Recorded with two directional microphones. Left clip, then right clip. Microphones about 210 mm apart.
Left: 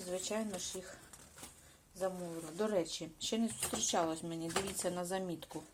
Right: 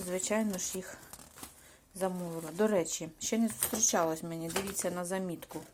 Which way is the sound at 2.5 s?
20° right (ahead or behind).